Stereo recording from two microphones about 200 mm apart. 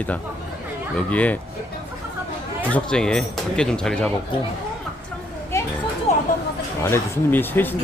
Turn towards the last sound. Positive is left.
turn(degrees=10)  # may be behind; listen again after turning